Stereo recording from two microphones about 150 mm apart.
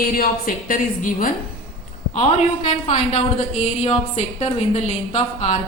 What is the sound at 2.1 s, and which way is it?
A woman's voice, 50° left (ahead or behind).